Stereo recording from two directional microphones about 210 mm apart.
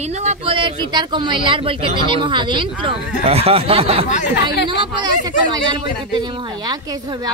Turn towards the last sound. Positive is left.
turn(degrees=-20)  # may be behind; listen again after turning